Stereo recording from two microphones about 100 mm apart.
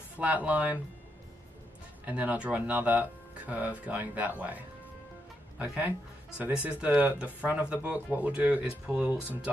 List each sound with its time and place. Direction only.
0.2 s speech: 15° right (ahead or behind)
2.0 s speech: 15° right (ahead or behind)